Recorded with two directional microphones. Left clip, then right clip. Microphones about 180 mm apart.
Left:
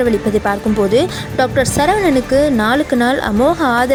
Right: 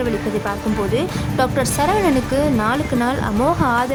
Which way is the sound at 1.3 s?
15° left (ahead or behind).